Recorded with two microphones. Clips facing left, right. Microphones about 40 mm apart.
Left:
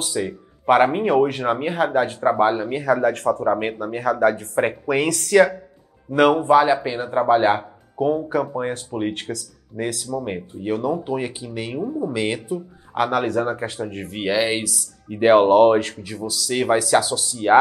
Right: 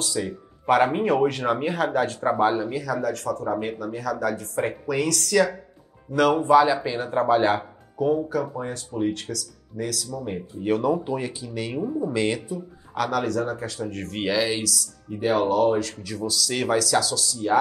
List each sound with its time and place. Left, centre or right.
0.0 s speech: left
7.1 s speech: left
10.6 s speech: centre
11.1 s speech: left
11.7 s speech: centre
12.4 s speech: left
13.8 s speech: centre
15.0 s speech: left
16.0 s speech: left
16.3 s speech: centre
16.6 s speech: left
17.4 s speech: left